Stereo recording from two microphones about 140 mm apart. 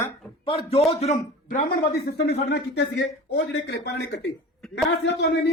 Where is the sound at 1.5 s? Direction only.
90° left.